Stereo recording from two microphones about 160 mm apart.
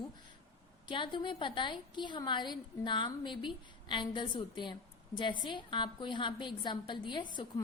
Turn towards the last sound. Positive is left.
turn(degrees=30)  # may be behind; listen again after turning